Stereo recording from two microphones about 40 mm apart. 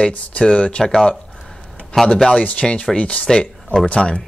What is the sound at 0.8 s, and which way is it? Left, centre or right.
A man's voice, centre.